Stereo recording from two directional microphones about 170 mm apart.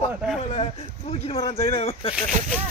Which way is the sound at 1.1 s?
35° left (ahead or behind).